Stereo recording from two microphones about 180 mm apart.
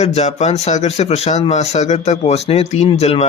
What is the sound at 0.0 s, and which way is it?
Speech, 40° left (ahead or behind).